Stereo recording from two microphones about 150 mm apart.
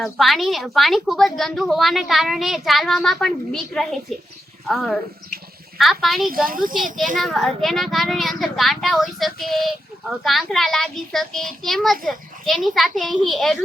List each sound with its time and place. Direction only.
0.0 s a woman's voice: centre (ahead or behind)
6.3 s speech: 70° right (ahead or behind)
7.2 s a woman's voice: centre (ahead or behind)